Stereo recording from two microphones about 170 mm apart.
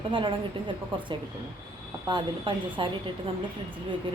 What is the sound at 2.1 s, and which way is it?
A woman's voice, 30° right (ahead or behind).